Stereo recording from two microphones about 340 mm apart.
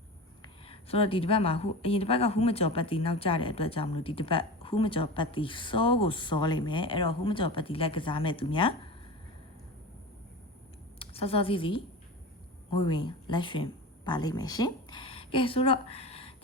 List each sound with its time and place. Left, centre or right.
0.4 s a woman's voice: centre
11.0 s a woman's voice: centre